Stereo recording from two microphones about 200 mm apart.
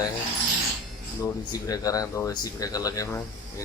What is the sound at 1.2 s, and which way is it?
Speech, 20° left (ahead or behind).